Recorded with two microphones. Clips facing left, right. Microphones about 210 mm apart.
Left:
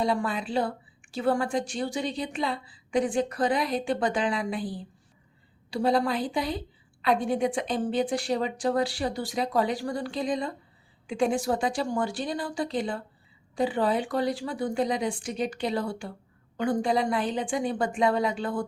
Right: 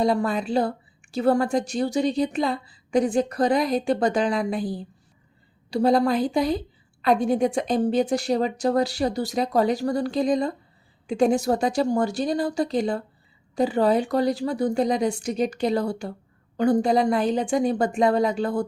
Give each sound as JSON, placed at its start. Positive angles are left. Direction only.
{"t": 0.0, "sound": "a woman's voice", "side_deg": -40}